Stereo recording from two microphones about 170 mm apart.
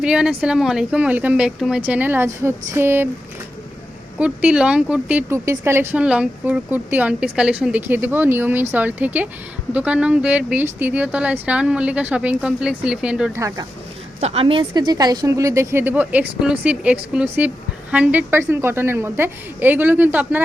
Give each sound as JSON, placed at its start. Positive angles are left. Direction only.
{"t": 0.0, "sound": "speech", "side_deg": -5}
{"t": 4.2, "sound": "speech", "side_deg": -5}
{"t": 13.3, "sound": "speech", "side_deg": -20}
{"t": 14.2, "sound": "speech", "side_deg": -35}